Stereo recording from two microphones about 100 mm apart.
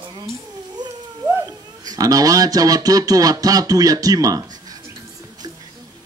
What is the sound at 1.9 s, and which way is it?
Mantra, 40° right (ahead or behind).